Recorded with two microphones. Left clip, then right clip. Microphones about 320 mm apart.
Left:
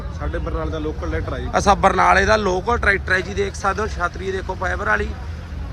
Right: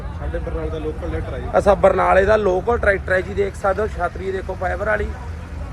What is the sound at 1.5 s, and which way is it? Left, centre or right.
A man's voice, centre.